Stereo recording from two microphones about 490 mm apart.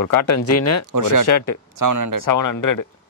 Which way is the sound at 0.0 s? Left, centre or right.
Left.